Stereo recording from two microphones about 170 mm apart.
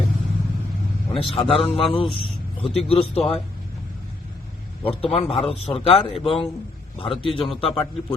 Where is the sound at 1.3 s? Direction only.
35° left (ahead or behind).